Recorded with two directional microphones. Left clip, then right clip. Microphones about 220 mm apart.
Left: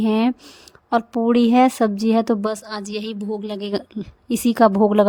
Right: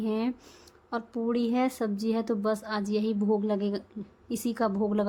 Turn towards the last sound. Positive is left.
turn(degrees=35)  # may be behind; listen again after turning